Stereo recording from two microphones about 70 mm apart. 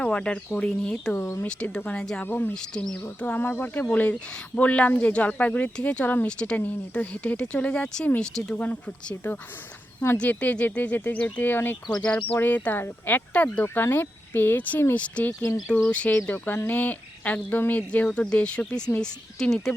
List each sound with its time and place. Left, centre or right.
0.0 s speech: centre
2.2 s speech: left
2.5 s speech: centre
3.2 s speech: left
4.1 s speech: centre
8.5 s speech: left
11.9 s speech: centre
15.3 s speech: left
15.6 s speech: centre
18.9 s speech: centre
19.4 s speech: centre